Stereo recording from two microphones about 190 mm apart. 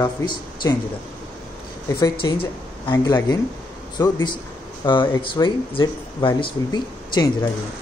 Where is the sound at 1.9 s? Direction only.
20° left (ahead or behind).